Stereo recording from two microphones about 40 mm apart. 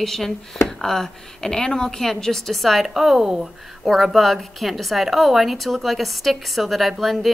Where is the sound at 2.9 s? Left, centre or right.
Centre.